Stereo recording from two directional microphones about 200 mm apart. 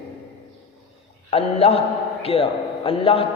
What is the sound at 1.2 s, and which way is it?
A man's voice, 30° left (ahead or behind).